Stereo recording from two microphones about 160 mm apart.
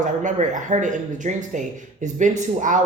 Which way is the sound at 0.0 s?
50° right (ahead or behind).